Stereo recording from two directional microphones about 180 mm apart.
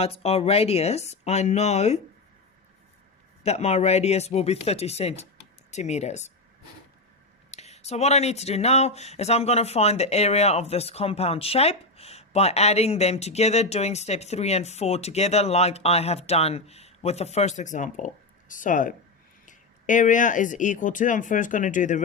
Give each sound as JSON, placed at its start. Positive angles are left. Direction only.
{"t": 0.0, "sound": "speech", "side_deg": 35}
{"t": 3.4, "sound": "speech", "side_deg": 35}
{"t": 7.5, "sound": "speech", "side_deg": 35}